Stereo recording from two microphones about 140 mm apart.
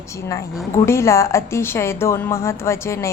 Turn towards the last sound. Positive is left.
turn(degrees=20)  # may be behind; listen again after turning